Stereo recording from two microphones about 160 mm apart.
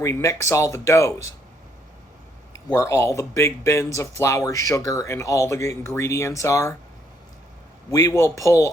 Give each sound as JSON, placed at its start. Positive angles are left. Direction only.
{"t": 0.0, "sound": "speech", "side_deg": 20}
{"t": 2.7, "sound": "speech", "side_deg": 15}
{"t": 7.9, "sound": "speech", "side_deg": 20}